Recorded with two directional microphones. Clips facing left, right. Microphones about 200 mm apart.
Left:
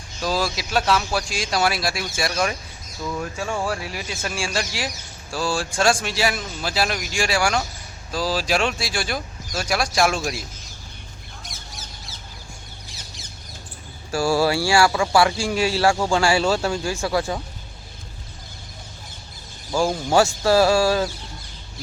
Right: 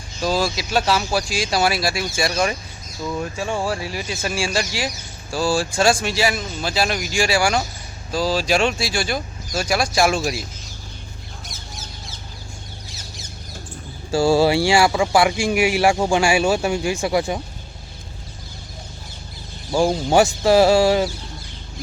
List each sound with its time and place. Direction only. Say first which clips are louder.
0.2 s speech: right 3 dB; centre (ahead or behind)
14.1 s speech: right 4 dB; 25° right (ahead or behind)
19.7 s speech: right 3 dB; 20° right (ahead or behind)